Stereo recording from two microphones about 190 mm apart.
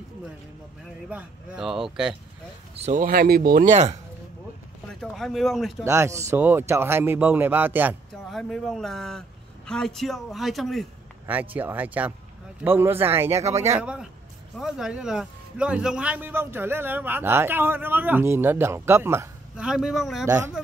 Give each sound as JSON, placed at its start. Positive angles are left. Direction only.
{"t": 1.1, "sound": "speech", "side_deg": -5}
{"t": 2.7, "sound": "speech", "side_deg": -35}
{"t": 4.8, "sound": "speech", "side_deg": 0}
{"t": 5.9, "sound": "a man's voice", "side_deg": -15}
{"t": 8.3, "sound": "a man's voice", "side_deg": 0}
{"t": 13.3, "sound": "speech", "side_deg": -35}
{"t": 13.7, "sound": "a man's voice", "side_deg": -5}
{"t": 20.2, "sound": "a man's voice", "side_deg": -15}